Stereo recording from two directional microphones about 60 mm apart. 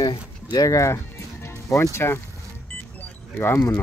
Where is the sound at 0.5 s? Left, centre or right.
Left.